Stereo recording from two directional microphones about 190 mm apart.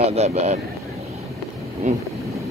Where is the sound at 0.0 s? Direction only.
35° right (ahead or behind).